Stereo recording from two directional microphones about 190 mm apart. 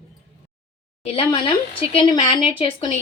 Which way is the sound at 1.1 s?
30° left (ahead or behind).